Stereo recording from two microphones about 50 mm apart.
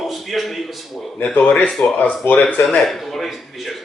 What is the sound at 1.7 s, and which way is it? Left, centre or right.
Speech, centre.